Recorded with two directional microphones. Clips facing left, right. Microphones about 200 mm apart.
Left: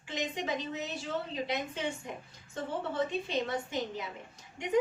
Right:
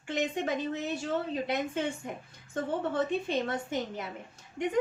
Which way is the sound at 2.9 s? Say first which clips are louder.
Even; 50° right (ahead or behind).